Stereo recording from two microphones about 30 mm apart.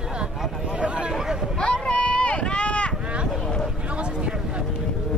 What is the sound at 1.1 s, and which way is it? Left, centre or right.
Speech, centre.